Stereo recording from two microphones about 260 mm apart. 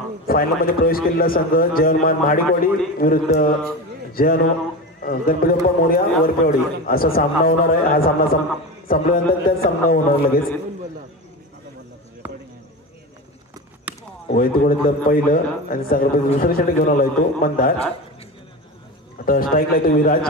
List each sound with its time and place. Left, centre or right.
0.3 s a man's voice: left
13.9 s chop: centre
14.3 s a man's voice: left
19.2 s a man's voice: left